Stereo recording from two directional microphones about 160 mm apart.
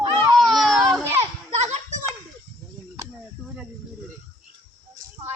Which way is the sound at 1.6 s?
45° right (ahead or behind).